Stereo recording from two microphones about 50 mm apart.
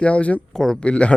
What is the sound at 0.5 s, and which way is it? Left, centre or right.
Speech, centre.